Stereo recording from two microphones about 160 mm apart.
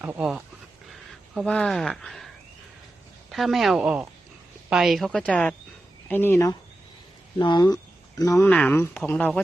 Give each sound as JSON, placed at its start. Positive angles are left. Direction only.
{"t": 0.0, "sound": "speech", "side_deg": -10}
{"t": 1.4, "sound": "speech", "side_deg": 5}
{"t": 3.3, "sound": "speech", "side_deg": 0}
{"t": 7.3, "sound": "speech", "side_deg": 25}
{"t": 8.4, "sound": "speech", "side_deg": 10}